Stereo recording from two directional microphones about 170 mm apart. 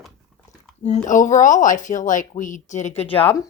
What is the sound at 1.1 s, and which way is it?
Speech, 50° left (ahead or behind).